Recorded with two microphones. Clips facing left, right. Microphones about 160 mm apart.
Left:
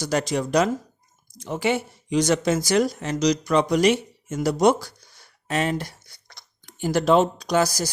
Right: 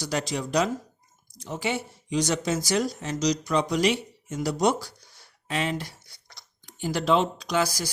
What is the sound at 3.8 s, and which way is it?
Speech, 45° left (ahead or behind).